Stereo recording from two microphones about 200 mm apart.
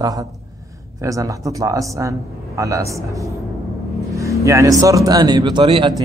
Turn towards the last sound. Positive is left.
turn(degrees=-25)  # may be behind; listen again after turning